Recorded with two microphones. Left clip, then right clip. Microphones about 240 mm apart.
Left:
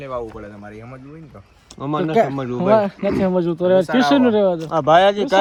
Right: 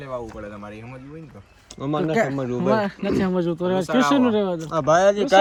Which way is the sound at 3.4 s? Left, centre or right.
Left.